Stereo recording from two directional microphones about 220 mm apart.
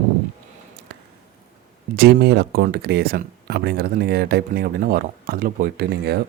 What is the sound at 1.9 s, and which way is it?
Speech, 45° right (ahead or behind).